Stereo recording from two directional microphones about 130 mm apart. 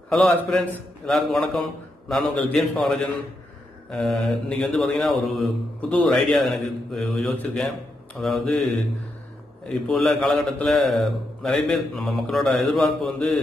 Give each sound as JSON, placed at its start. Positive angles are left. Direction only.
{"t": 0.1, "sound": "a man's voice", "side_deg": 5}
{"t": 9.7, "sound": "a man's voice", "side_deg": 0}